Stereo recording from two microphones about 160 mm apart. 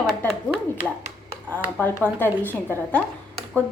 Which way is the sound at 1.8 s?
10° left (ahead or behind).